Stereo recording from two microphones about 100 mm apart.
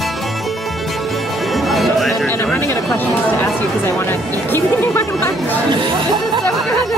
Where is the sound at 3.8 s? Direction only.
25° left (ahead or behind).